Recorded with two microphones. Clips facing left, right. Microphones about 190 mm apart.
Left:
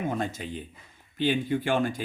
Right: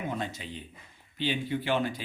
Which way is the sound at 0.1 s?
50° left (ahead or behind).